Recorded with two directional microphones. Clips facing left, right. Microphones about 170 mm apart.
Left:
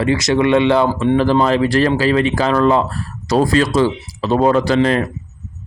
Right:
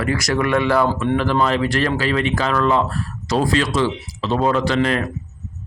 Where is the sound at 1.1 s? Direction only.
35° left (ahead or behind).